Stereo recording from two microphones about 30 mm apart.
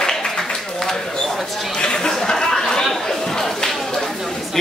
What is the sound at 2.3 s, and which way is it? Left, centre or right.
Chatter, centre.